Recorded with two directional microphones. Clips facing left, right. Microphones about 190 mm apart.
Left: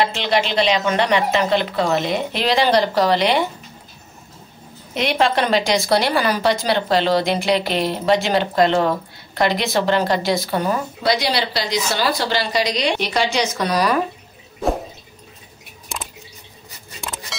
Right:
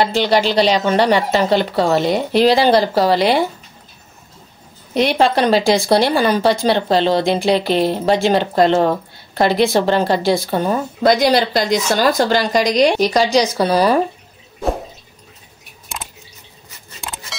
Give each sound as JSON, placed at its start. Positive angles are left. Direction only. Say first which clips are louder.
{"t": 0.0, "sound": "a woman's voice", "louder": "right 4 dB", "side_deg": -35}
{"t": 4.9, "sound": "a woman's voice", "louder": "right 4 dB", "side_deg": -35}
{"t": 11.0, "sound": "speech", "louder": "right 10 dB", "side_deg": -50}